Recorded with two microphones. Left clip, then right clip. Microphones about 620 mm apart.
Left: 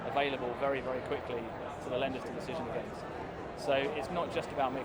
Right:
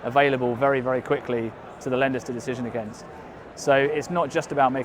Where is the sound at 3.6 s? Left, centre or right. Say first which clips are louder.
Right 11 dB; right.